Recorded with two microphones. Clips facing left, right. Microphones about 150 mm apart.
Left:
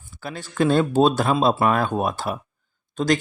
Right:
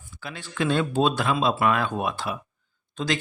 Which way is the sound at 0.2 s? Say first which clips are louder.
Left 6 dB; 40° left (ahead or behind).